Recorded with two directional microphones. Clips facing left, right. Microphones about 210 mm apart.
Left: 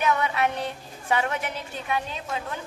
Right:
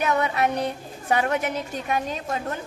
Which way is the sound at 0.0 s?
40° right (ahead or behind).